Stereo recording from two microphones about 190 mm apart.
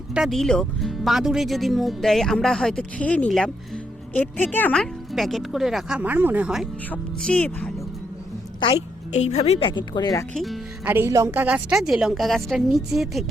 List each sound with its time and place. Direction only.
0.1 s speech: centre (ahead or behind)
6.9 s speech: 5° left (ahead or behind)
8.6 s a woman's voice: 30° left (ahead or behind)
10.3 s speech: centre (ahead or behind)
10.9 s speech: 15° right (ahead or behind)